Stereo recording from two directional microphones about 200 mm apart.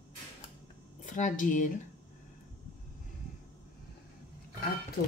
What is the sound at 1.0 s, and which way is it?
Speech, 40° left (ahead or behind).